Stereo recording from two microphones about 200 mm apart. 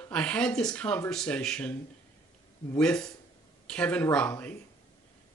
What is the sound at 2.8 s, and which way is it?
Speech, 5° left (ahead or behind).